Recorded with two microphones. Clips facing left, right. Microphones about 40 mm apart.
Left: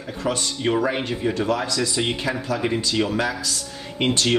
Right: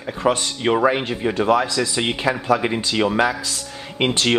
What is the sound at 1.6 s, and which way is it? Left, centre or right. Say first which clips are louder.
Speech: right 3 dB; centre.